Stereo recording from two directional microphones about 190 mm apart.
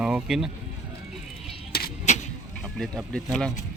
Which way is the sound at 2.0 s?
40° left (ahead or behind).